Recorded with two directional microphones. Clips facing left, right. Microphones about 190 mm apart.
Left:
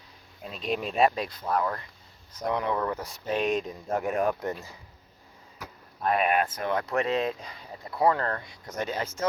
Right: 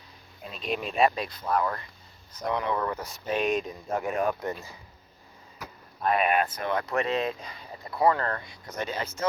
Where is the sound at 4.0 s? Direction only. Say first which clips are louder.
Left 1 dB; 50° left (ahead or behind).